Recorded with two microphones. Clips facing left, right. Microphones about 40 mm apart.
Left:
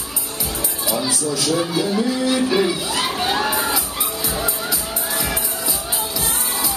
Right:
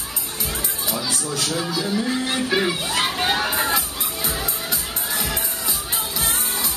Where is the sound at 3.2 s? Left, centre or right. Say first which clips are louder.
Left 2 dB; centre.